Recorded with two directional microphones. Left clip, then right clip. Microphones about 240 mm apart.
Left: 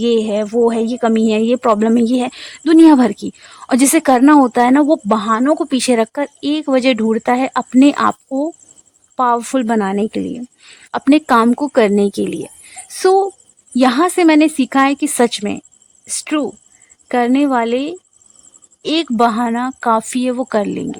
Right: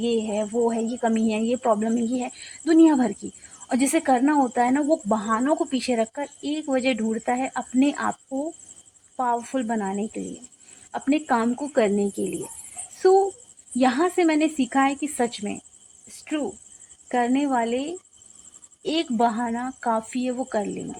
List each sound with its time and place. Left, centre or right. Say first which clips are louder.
0.0 s speech: left 10 dB; left